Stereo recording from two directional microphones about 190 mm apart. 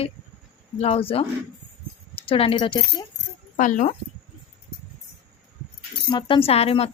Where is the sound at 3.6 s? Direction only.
40° left (ahead or behind).